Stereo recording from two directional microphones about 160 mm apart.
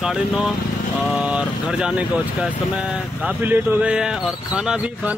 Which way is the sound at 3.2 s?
10° right (ahead or behind).